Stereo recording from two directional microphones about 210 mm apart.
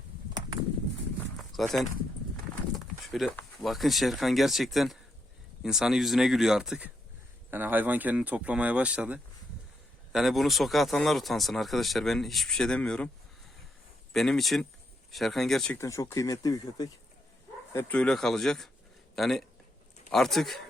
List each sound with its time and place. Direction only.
1.4 s a sound: centre (ahead or behind)
2.7 s speech: centre (ahead or behind)
14.1 s speech: centre (ahead or behind); by 16.9 s 20° left (ahead or behind)
17.7 s speech: 5° left (ahead or behind)